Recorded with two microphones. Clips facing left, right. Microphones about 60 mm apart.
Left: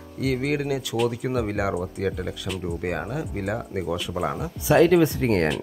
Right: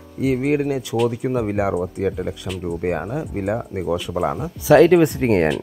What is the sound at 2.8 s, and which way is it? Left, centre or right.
Speech, centre.